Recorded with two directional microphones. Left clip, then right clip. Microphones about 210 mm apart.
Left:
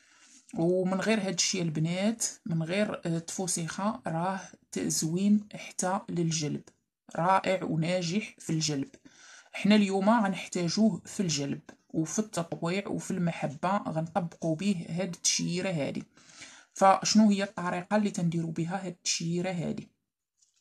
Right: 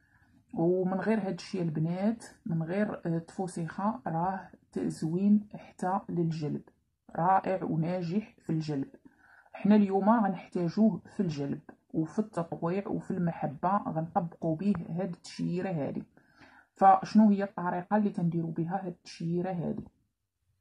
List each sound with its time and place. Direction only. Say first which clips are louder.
0.6 s speech: left 1 dB; 25° left (ahead or behind)
3.6 s speech: even; 35° left (ahead or behind)
4.7 s speech: left 2 dB; 20° left (ahead or behind)
17.4 s speech: even; 35° left (ahead or behind)
18.0 s speech: even; 20° left (ahead or behind)